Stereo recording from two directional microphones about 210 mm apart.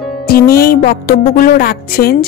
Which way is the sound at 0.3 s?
45° left (ahead or behind).